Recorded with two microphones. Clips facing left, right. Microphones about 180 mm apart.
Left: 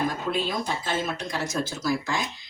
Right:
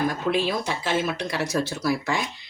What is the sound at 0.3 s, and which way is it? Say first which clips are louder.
Speech: right 3 dB; 80° right.